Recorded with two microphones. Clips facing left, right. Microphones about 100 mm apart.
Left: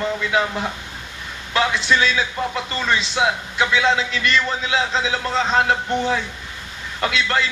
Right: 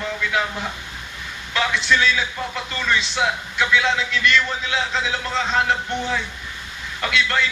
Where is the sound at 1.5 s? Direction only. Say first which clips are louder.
Left 2 dB; 35° left (ahead or behind).